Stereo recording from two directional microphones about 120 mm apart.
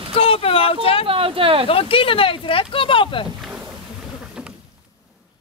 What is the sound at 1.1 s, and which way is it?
Speech, 50° right (ahead or behind).